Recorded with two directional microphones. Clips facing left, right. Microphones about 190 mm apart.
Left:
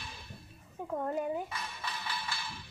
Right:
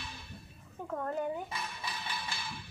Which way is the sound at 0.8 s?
15° left (ahead or behind).